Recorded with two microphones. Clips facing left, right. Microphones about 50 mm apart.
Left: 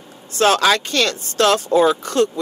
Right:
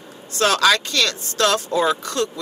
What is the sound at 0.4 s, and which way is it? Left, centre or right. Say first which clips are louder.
Speech: left 2 dB; left.